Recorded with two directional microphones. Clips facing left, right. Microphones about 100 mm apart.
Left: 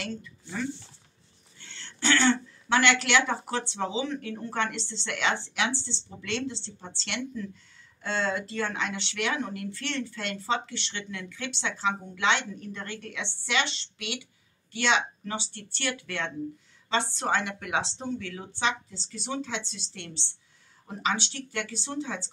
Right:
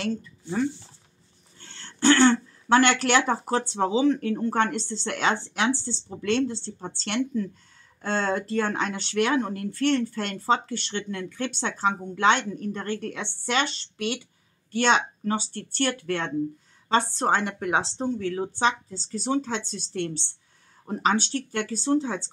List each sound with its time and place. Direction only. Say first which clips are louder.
0.0 s a woman's voice: right 7 dB; 35° right (ahead or behind)